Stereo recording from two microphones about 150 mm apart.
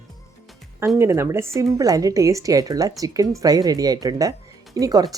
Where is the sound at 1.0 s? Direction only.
15° right (ahead or behind).